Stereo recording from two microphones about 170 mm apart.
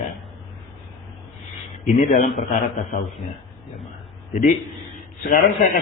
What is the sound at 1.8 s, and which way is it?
A man's voice, 50° left (ahead or behind).